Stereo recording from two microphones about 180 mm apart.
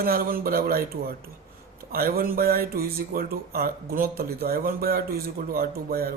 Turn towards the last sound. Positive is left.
turn(degrees=-60)  # may be behind; listen again after turning